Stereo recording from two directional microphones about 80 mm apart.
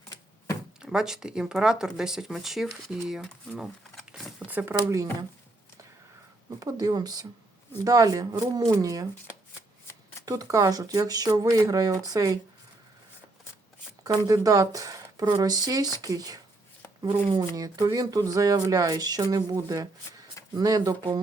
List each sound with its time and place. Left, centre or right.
0.8 s speech: centre
3.6 s a sound: centre
4.4 s speech: right
6.6 s speech: right
10.2 s speech: right
14.3 s speech: right